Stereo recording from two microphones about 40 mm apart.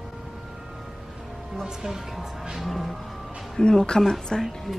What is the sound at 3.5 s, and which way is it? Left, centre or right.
Speech, centre.